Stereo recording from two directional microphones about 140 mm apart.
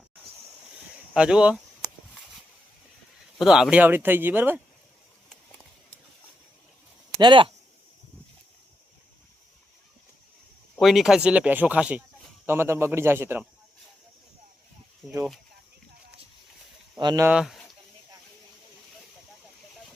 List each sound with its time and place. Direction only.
1.1 s speech: 5° right (ahead or behind)
3.3 s speech: 5° right (ahead or behind)
7.2 s speech: 35° right (ahead or behind)
10.8 s speech: centre (ahead or behind); by 13.4 s 15° right (ahead or behind)
15.0 s speech: centre (ahead or behind)
17.0 s speech: 30° right (ahead or behind)
17.2 s speech: 5° right (ahead or behind)